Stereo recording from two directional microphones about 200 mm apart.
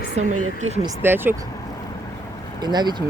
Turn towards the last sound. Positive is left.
turn(degrees=-20)  # may be behind; listen again after turning